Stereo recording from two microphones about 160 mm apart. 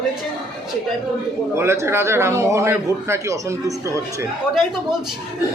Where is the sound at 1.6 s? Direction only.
15° right (ahead or behind).